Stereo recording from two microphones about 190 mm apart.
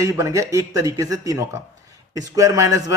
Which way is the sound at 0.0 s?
15° right (ahead or behind).